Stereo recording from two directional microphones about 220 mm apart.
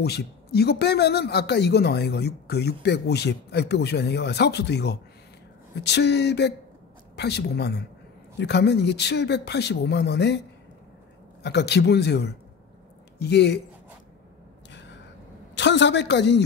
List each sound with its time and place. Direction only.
0.0 s speech: 45° left (ahead or behind)
11.4 s speech: 50° left (ahead or behind)
14.7 s a sound: 55° left (ahead or behind)
15.5 s speech: 55° left (ahead or behind)